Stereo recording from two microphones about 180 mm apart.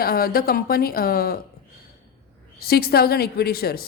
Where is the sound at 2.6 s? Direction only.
60° left (ahead or behind).